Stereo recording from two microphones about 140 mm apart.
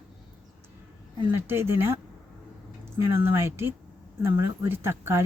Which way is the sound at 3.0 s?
20° right (ahead or behind).